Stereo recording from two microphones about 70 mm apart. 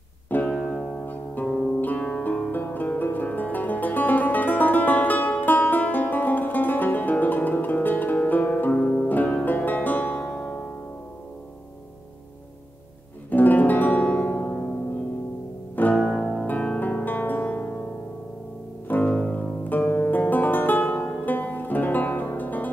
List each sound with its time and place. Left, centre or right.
0.3 s music: left
0.6 s music: centre
1.0 s music: left
9.1 s music: left
13.3 s music: left
15.7 s music: left
16.0 s music: centre
16.4 s music: left
18.9 s music: left